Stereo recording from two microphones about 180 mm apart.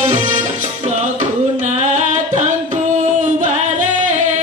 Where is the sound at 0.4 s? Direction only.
45° right (ahead or behind).